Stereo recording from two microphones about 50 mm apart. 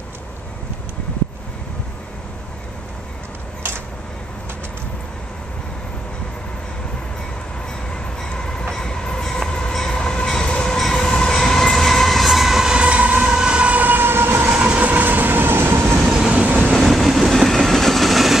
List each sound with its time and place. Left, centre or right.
7.9 s train: centre
12.7 s train: right
14.5 s train: right
16.1 s train: centre
16.7 s train: centre